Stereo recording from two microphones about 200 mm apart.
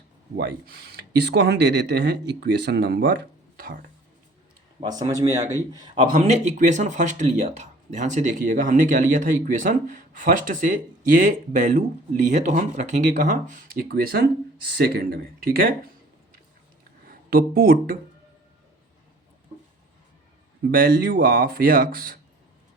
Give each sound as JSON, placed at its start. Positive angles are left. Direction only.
{"t": 0.3, "sound": "speech", "side_deg": -50}
{"t": 4.8, "sound": "speech", "side_deg": -20}
{"t": 5.9, "sound": "speech", "side_deg": -30}
{"t": 17.1, "sound": "speech", "side_deg": -50}
{"t": 20.7, "sound": "a man's voice", "side_deg": -50}